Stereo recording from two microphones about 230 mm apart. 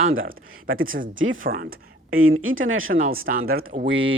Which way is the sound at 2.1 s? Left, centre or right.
Right.